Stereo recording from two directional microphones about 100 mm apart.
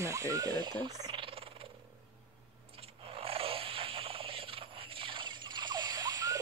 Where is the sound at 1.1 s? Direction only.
65° right (ahead or behind).